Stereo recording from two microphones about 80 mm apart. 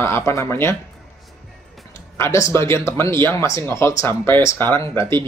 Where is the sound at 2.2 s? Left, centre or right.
Left.